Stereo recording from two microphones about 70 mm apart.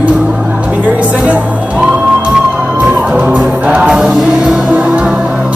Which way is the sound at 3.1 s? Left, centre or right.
Centre.